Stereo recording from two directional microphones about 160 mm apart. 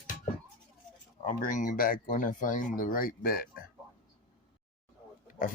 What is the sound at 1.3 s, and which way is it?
Speech, 55° left (ahead or behind).